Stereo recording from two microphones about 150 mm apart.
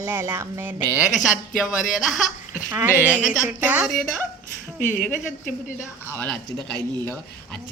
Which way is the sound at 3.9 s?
Centre (ahead or behind).